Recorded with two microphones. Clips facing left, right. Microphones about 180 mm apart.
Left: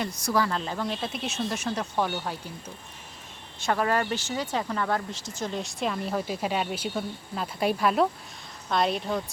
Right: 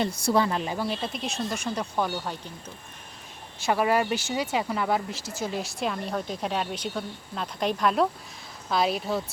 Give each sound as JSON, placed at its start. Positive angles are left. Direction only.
{"t": 0.0, "sound": "speech", "side_deg": -30}
{"t": 0.9, "sound": "speech", "side_deg": 0}
{"t": 3.7, "sound": "speech", "side_deg": -10}